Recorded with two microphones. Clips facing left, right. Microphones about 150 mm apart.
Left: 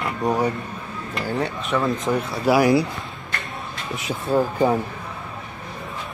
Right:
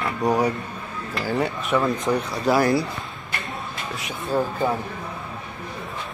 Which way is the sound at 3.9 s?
20° left (ahead or behind).